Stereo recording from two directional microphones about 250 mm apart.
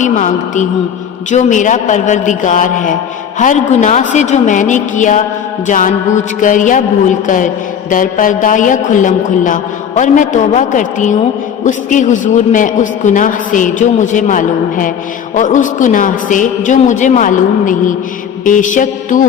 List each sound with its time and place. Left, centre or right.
0.0 s a woman's voice: left